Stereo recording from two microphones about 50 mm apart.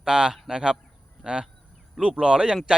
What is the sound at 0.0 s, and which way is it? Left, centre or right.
Speech, centre.